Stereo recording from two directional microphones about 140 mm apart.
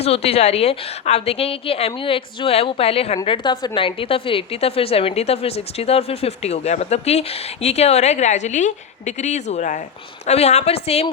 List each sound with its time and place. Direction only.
0.0 s a woman's voice: 45° left (ahead or behind)
3.2 s a woman's voice: 35° left (ahead or behind); by 9.8 s 60° left (ahead or behind)
10.2 s a woman's voice: 50° left (ahead or behind)